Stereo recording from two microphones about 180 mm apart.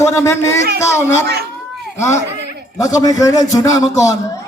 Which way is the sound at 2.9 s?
20° left (ahead or behind).